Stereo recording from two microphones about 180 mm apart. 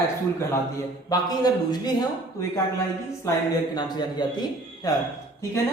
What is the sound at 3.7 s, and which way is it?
A man's voice, 25° left (ahead or behind).